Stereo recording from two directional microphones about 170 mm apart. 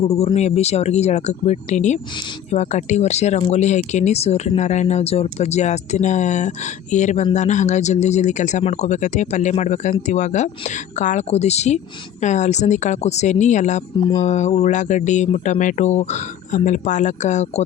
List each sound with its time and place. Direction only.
0.0 s speech: 35° left (ahead or behind)